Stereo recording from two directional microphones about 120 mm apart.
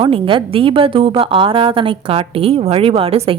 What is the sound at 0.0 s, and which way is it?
A woman's voice, 45° right (ahead or behind).